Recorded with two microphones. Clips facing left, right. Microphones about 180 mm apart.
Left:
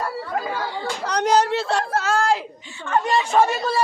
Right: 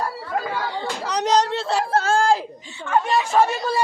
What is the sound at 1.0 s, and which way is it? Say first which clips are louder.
Speech: left 1 dB; centre (ahead or behind).